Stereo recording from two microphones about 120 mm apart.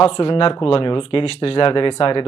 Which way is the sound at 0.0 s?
50° left (ahead or behind).